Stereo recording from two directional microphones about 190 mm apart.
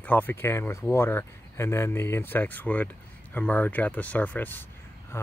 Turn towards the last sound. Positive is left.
turn(degrees=10)  # may be behind; listen again after turning